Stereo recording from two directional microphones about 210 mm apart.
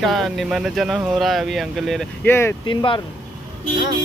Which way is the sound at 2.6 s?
25° left (ahead or behind).